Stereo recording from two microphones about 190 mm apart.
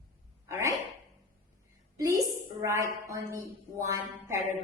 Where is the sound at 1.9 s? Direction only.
15° right (ahead or behind).